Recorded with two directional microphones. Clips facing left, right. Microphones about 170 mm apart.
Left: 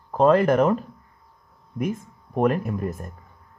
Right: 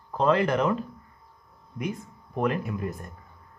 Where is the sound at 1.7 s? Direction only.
45° left (ahead or behind).